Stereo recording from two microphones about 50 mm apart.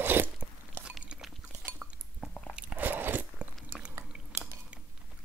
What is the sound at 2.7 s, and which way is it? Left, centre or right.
Biting, right.